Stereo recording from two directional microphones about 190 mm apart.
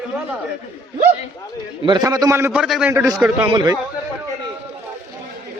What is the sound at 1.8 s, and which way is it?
A man's voice, 20° right (ahead or behind).